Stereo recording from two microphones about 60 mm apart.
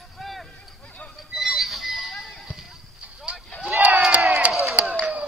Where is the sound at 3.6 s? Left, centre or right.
Right.